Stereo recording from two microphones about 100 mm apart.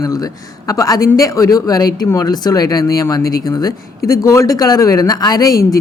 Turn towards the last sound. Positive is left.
turn(degrees=40)  # may be behind; listen again after turning